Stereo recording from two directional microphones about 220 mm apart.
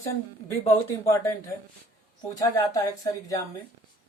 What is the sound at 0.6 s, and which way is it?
Speech, 15° left (ahead or behind).